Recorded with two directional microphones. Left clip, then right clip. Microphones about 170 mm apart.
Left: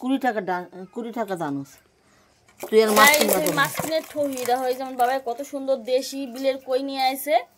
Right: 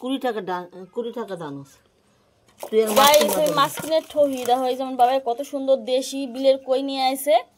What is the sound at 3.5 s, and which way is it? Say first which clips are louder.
Speech: right 3 dB; 20° right (ahead or behind).